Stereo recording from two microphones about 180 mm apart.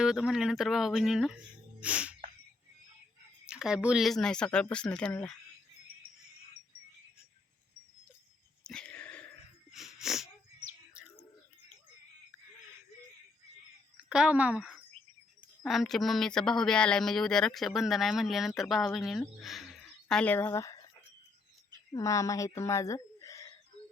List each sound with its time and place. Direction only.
0.0 s a woman's voice: 5° right (ahead or behind)
1.8 s cricket: 5° right (ahead or behind)
3.4 s a woman's voice: 5° right (ahead or behind)
8.6 s a sound: 5° left (ahead or behind)
9.7 s wheeze: centre (ahead or behind)
13.9 s a woman's voice: 5° right (ahead or behind); by 20.9 s 15° left (ahead or behind)
21.9 s a woman's voice: 15° left (ahead or behind)